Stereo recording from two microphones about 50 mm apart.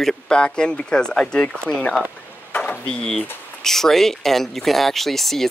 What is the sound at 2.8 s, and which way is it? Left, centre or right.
Speech, centre.